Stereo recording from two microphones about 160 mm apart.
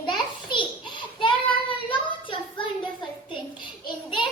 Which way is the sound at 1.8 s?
30° left (ahead or behind).